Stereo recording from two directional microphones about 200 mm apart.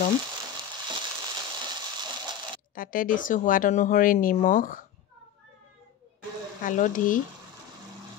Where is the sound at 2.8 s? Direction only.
45° left (ahead or behind).